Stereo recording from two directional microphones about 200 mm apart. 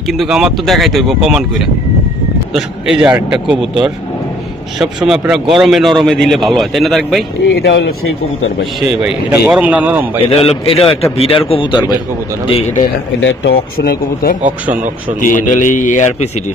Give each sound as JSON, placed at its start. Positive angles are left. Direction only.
{"t": 0.2, "sound": "a man's voice", "side_deg": 0}
{"t": 2.5, "sound": "a man's voice", "side_deg": -5}
{"t": 7.4, "sound": "speech", "side_deg": 60}
{"t": 9.0, "sound": "speech", "side_deg": -5}
{"t": 10.2, "sound": "a man's voice", "side_deg": 30}
{"t": 13.7, "sound": "a man's voice", "side_deg": 50}